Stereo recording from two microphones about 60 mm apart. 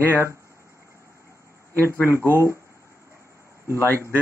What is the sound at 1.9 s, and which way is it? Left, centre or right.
Speech, left.